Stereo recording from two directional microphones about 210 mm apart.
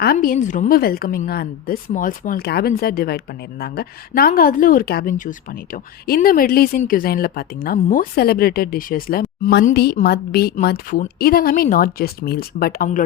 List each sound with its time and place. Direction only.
0.0 s a woman's voice: 45° left (ahead or behind)